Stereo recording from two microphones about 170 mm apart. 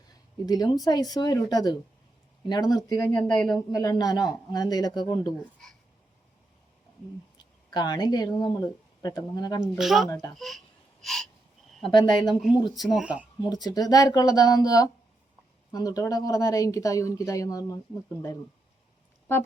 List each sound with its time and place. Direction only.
0.4 s a woman's voice: 20° left (ahead or behind)
7.3 s speech: 25° left (ahead or behind)
9.7 s speech: centre (ahead or behind)
10.1 s a woman's voice: 20° left (ahead or behind)
10.3 s speech: centre (ahead or behind)
11.0 s gasp: centre (ahead or behind)
11.9 s a woman's voice: 25° left (ahead or behind)
12.8 s speech: 5° right (ahead or behind)
13.4 s a woman's voice: 25° left (ahead or behind)